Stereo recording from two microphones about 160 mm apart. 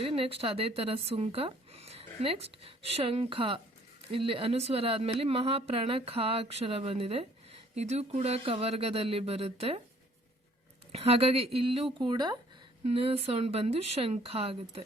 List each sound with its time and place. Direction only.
0.0 s a woman's voice: 35° right (ahead or behind)
10.9 s speech: 40° right (ahead or behind)
12.8 s speech: 35° right (ahead or behind)